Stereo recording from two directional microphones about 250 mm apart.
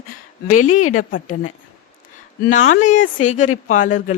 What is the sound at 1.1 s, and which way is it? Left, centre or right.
A woman's voice, left.